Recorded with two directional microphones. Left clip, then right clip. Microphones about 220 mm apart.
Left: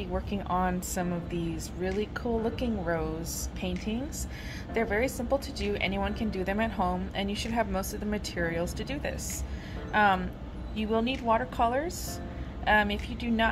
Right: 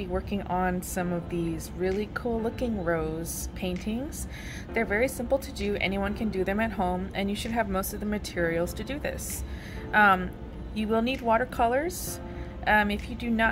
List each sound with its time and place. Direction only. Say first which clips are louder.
0.0 s a woman's voice: right 2 dB; 15° right (ahead or behind)
4.7 s a woman's voice: right 2 dB; 15° right (ahead or behind)